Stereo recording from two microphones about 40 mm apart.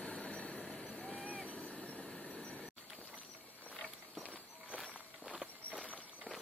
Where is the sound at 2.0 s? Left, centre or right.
Centre.